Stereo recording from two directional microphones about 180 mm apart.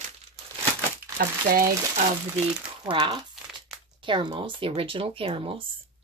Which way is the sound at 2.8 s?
25° right (ahead or behind).